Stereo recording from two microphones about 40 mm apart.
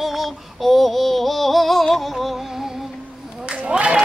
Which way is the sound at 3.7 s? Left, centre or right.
Right.